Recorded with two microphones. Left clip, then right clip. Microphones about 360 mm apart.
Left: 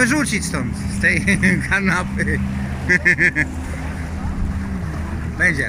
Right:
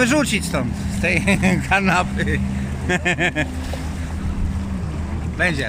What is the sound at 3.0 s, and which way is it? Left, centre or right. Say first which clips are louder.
Vehicle: left 5 dB; right.